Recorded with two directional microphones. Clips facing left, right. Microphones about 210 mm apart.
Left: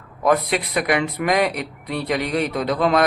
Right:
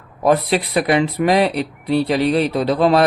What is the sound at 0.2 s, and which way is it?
Speech, 30° right (ahead or behind).